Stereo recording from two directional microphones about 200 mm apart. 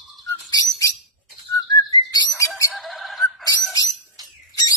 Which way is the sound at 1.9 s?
15° left (ahead or behind).